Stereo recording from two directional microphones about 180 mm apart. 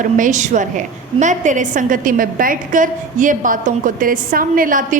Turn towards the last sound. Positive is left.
turn(degrees=-50)  # may be behind; listen again after turning